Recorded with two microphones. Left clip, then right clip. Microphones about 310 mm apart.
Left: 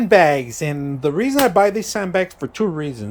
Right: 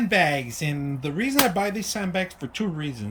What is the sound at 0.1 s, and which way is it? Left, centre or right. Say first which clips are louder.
Speech: left 10 dB; centre.